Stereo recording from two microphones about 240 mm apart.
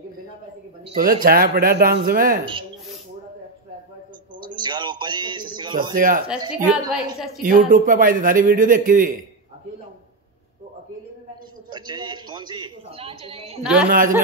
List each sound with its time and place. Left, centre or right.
0.8 s a man's voice: right
4.4 s a sound: centre
5.9 s a man's voice: right
6.5 s a woman's voice: centre
7.4 s a man's voice: right
11.7 s a man's voice: centre
13.8 s a man's voice: right